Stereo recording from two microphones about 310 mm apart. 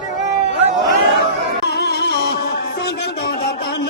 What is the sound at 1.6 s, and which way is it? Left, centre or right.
Music, left.